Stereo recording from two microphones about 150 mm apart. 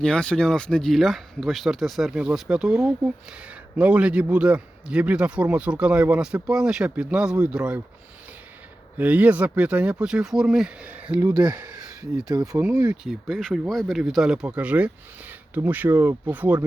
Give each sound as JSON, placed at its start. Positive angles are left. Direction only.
{"t": 0.0, "sound": "a man's voice", "side_deg": 5}
{"t": 9.0, "sound": "a man's voice", "side_deg": -10}
{"t": 12.3, "sound": "speech", "side_deg": -25}
{"t": 12.5, "sound": "a man's voice", "side_deg": -10}